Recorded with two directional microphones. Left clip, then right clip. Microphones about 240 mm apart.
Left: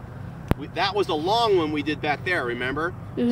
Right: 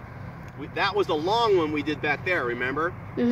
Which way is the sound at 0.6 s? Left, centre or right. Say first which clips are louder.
Even; centre.